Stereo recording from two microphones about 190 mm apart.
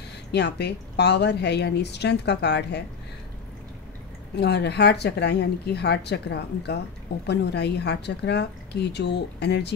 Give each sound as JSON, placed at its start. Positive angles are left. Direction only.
{"t": 0.3, "sound": "a woman's voice", "side_deg": 60}
{"t": 4.4, "sound": "a woman's voice", "side_deg": 60}